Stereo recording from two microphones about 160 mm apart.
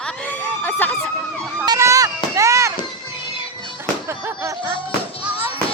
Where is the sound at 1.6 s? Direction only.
20° right (ahead or behind).